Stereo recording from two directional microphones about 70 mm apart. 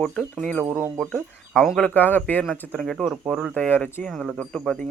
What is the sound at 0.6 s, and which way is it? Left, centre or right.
Speech, right.